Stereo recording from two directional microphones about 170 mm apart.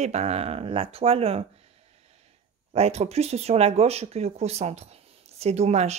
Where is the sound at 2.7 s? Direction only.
40° right (ahead or behind).